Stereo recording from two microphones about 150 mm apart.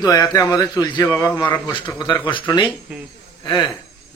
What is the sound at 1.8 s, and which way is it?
Speech, 30° left (ahead or behind).